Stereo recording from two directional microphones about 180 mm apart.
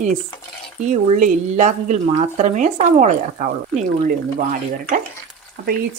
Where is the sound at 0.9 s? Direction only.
40° right (ahead or behind).